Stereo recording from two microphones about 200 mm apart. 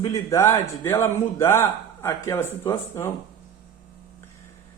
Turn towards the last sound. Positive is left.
turn(degrees=15)  # may be behind; listen again after turning